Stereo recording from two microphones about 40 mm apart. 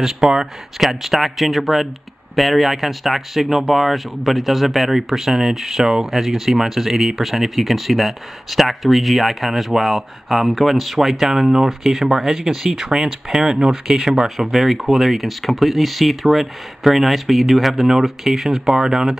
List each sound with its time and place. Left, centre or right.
0.0 s speech: centre
0.7 s speech: centre